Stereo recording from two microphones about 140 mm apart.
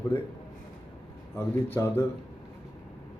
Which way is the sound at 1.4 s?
15° left (ahead or behind).